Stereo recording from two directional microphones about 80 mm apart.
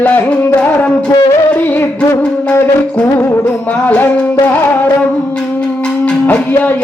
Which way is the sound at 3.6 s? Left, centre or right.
Left.